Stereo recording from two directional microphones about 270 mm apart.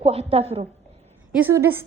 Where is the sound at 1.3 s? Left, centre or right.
Centre.